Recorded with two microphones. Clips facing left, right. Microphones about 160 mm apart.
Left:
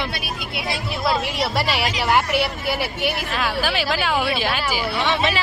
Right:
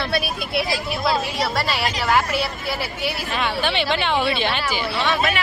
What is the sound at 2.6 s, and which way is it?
Speech, 60° left (ahead or behind).